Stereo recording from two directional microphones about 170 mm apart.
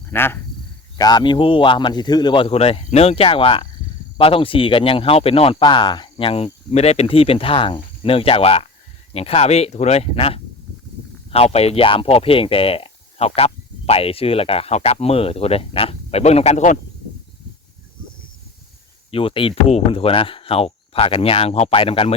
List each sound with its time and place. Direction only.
0.1 s speech: 15° left (ahead or behind)
0.9 s speech: 25° left (ahead or behind); by 16.7 s 40° left (ahead or behind)
19.1 s speech: 30° left (ahead or behind)